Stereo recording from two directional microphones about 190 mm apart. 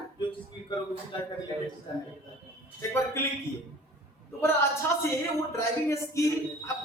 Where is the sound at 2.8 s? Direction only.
15° left (ahead or behind).